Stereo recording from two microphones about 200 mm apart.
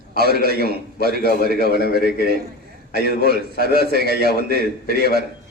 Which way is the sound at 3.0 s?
50° right (ahead or behind).